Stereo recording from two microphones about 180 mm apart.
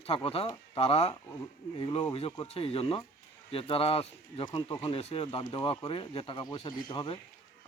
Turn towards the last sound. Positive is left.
turn(degrees=25)  # may be behind; listen again after turning